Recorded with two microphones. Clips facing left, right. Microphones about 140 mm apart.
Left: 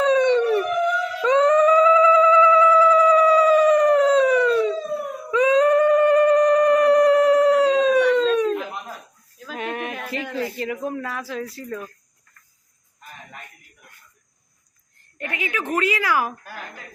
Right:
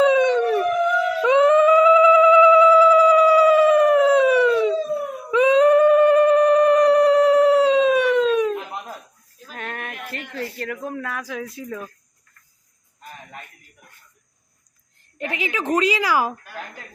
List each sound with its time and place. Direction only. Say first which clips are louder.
0.0 s howl: right 1 dB; 5° right (ahead or behind)
1.2 s gargling: right 1 dB; 10° right (ahead or behind)
5.3 s a sound: right 2 dB; 15° right (ahead or behind)
9.6 s a sound: left 4 dB; 5° left (ahead or behind)
11.3 s speech: left 1 dB; centre (ahead or behind)
15.2 s a woman's voice: right 2 dB; 25° right (ahead or behind)